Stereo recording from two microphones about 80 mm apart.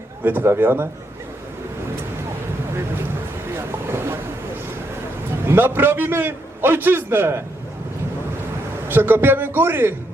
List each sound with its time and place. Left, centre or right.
0.3 s a man's voice: right
3.5 s vehicle: right
5.5 s a man's voice: right
8.9 s a man's voice: right